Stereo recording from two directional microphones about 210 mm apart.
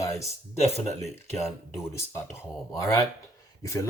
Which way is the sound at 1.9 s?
15° left (ahead or behind).